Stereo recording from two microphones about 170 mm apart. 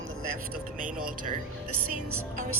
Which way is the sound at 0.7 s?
55° right (ahead or behind).